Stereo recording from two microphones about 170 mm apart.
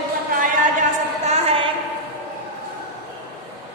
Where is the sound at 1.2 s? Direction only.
35° right (ahead or behind).